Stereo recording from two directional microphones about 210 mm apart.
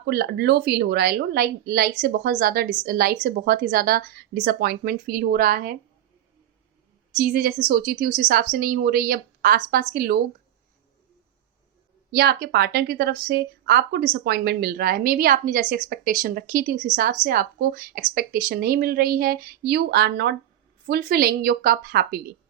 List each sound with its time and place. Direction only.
0.0 s speech: 50° right (ahead or behind)
7.2 s speech: 40° right (ahead or behind)
12.1 s speech: 50° right (ahead or behind)